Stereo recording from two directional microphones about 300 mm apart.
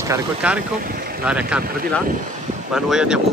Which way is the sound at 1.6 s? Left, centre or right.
Right.